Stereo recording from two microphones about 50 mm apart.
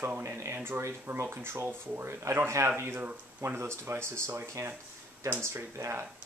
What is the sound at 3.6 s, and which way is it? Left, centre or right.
Speech, right.